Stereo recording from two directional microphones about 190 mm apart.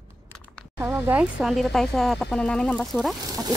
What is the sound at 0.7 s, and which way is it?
Speech, 10° right (ahead or behind).